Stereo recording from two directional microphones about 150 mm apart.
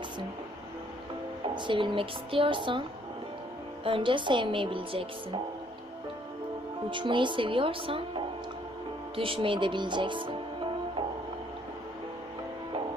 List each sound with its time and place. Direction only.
1.5 s speech: 30° right (ahead or behind)
3.8 s speech: 35° right (ahead or behind)
6.9 s speech: 35° right (ahead or behind)